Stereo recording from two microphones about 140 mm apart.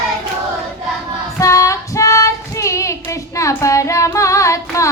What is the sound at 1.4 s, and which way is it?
Child singing, 25° left (ahead or behind).